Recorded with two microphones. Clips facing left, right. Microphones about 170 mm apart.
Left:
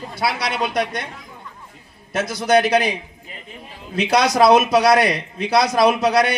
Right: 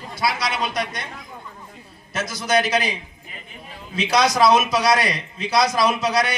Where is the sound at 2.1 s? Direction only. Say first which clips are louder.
Left 5 dB; 60° left (ahead or behind).